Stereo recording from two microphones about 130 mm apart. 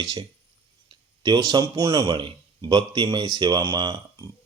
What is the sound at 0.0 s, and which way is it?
A man's voice, 35° right (ahead or behind).